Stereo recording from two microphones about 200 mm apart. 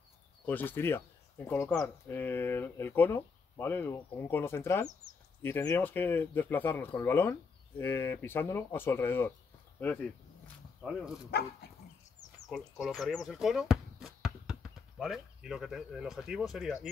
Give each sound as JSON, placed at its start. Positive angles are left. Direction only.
{"t": 0.5, "sound": "speech", "side_deg": 10}
{"t": 11.6, "sound": "dog", "side_deg": 55}
{"t": 12.4, "sound": "speech", "side_deg": 0}